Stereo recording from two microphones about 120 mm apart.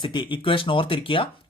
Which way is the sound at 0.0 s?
45° left (ahead or behind).